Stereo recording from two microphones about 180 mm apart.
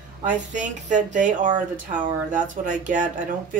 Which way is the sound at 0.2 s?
45° right (ahead or behind).